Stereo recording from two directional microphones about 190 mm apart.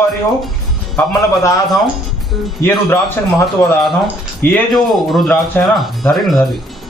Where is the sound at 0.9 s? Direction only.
15° left (ahead or behind).